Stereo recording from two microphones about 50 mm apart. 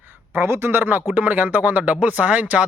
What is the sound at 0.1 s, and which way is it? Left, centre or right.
Speech, right.